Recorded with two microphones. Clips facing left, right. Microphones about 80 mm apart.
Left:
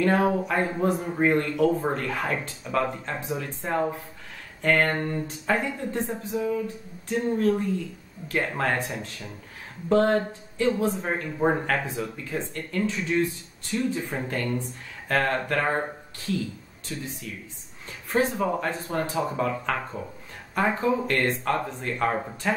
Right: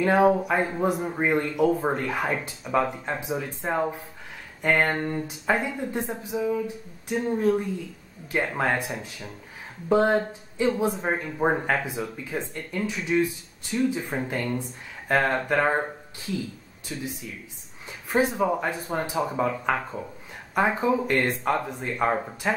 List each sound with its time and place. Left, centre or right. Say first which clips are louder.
0.0 s speech: right 3 dB; centre
16.9 s speech: right 1 dB; centre
22.1 s speech: right 2 dB; centre